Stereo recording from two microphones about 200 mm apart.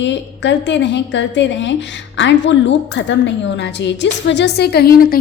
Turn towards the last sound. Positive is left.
turn(degrees=50)  # may be behind; listen again after turning